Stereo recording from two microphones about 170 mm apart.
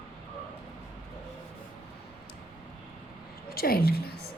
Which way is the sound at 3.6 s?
65° left (ahead or behind).